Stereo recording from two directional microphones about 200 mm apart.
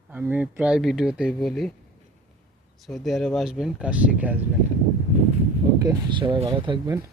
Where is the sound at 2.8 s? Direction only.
Centre (ahead or behind).